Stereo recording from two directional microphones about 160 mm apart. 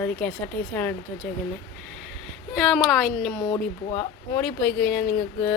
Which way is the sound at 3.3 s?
15° left (ahead or behind).